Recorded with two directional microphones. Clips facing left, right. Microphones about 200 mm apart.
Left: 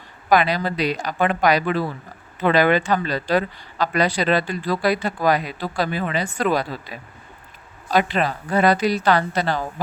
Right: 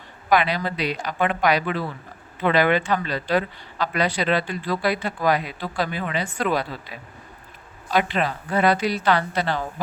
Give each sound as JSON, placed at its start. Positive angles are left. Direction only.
{"t": 0.3, "sound": "speech", "side_deg": 40}
{"t": 7.9, "sound": "speech", "side_deg": 40}